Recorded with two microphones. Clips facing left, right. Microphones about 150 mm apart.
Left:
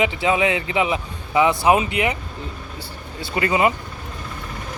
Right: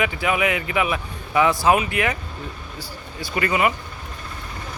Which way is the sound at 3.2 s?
25° left (ahead or behind).